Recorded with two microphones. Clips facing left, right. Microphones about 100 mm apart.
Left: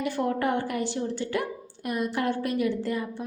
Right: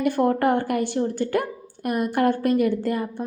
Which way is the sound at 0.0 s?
50° right (ahead or behind).